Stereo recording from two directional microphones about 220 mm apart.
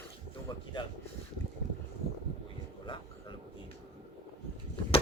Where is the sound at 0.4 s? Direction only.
20° left (ahead or behind).